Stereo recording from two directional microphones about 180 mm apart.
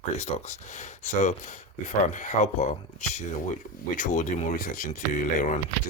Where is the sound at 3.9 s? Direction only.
45° left (ahead or behind).